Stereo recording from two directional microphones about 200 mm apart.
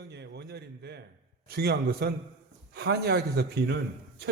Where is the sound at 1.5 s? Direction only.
50° right (ahead or behind).